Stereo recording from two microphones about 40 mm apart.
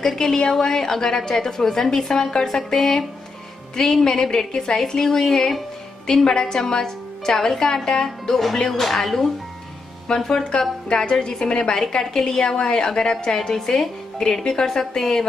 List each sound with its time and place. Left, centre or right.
0.0 s a woman's voice: centre